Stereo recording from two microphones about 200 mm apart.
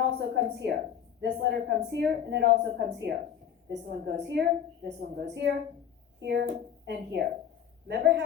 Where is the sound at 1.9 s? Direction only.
60° right (ahead or behind).